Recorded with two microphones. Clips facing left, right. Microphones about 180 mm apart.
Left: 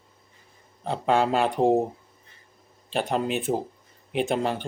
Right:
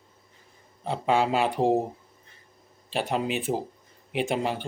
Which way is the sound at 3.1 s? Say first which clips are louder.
Left 2 dB; 5° right (ahead or behind).